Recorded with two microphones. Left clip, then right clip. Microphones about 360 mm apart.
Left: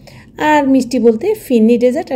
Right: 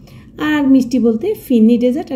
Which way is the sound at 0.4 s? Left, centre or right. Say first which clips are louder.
Left 3 dB; centre.